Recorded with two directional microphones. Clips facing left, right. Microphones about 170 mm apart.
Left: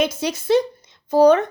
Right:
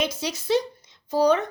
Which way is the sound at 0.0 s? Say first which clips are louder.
Left 6 dB; 50° left (ahead or behind).